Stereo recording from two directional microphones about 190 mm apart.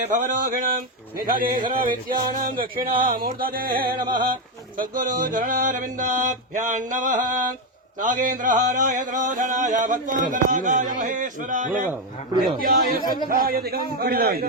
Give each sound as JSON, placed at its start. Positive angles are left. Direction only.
{"t": 0.2, "sound": "music", "side_deg": -45}